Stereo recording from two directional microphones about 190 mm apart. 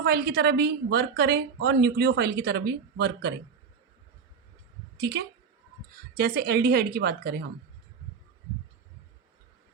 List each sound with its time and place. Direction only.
0.0 s a woman's voice: 60° right (ahead or behind)
4.9 s a woman's voice: 60° right (ahead or behind)